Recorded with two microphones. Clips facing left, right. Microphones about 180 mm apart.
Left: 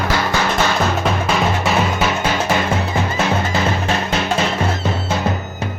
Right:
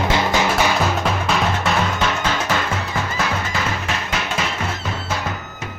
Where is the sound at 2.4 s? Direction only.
25° left (ahead or behind).